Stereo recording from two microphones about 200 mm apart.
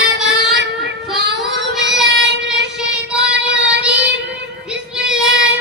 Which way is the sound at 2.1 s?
60° right (ahead or behind).